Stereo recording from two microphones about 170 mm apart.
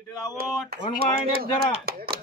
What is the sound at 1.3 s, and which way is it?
Speech, 65° right (ahead or behind).